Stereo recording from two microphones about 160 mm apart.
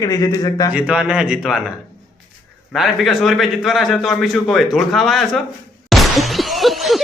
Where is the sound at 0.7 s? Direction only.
10° right (ahead or behind).